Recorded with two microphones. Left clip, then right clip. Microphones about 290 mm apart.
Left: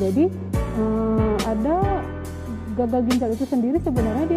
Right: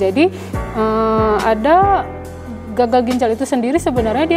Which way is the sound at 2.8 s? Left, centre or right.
Centre.